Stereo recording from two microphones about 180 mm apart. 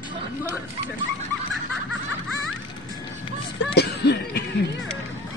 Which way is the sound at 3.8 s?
65° left (ahead or behind).